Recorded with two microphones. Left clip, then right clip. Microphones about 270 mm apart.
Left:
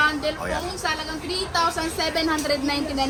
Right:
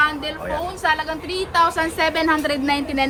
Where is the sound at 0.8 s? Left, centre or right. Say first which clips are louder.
Right 6 dB; right.